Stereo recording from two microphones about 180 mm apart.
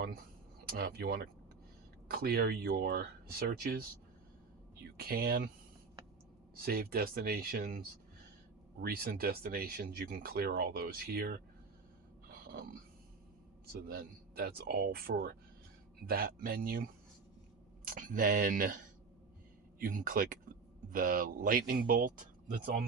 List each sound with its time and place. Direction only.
0.6 s speech: 60° right (ahead or behind)
6.6 s speech: 55° right (ahead or behind)
12.3 s a sound: 55° right (ahead or behind)
13.7 s speech: 55° right (ahead or behind)
19.8 s speech: 50° right (ahead or behind)